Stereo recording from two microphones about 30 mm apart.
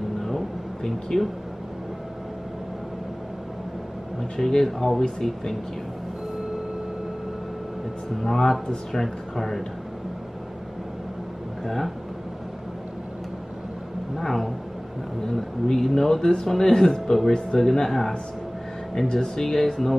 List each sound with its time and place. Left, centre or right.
1.1 s speech: left
4.4 s speech: centre
8.2 s speech: centre
11.6 s speech: centre
14.1 s speech: centre
19.0 s speech: left
19.4 s speech: centre